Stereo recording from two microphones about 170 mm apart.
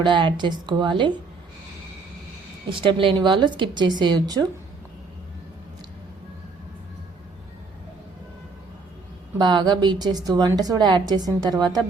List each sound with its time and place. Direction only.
0.0 s a woman's voice: 30° right (ahead or behind)
2.6 s a woman's voice: 30° right (ahead or behind)
9.4 s a woman's voice: 25° right (ahead or behind)